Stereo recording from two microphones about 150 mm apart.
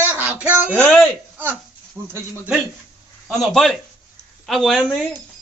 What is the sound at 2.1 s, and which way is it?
Speech, 15° right (ahead or behind).